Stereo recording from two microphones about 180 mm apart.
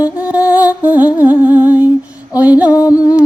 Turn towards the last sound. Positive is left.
turn(degrees=-5)  # may be behind; listen again after turning